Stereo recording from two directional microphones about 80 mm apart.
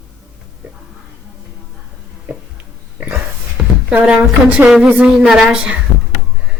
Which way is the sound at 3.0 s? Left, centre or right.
Centre.